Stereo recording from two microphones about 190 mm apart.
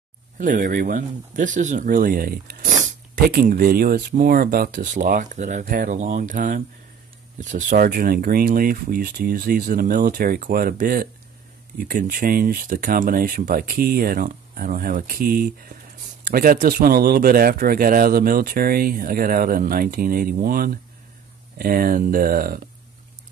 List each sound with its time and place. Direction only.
0.4 s speech: 45° right (ahead or behind)